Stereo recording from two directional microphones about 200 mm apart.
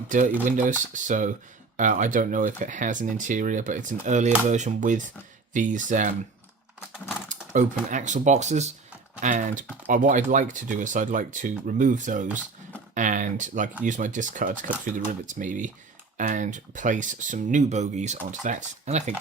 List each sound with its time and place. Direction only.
0.4 s speech: 40° right (ahead or behind)
7.3 s speech: 40° right (ahead or behind)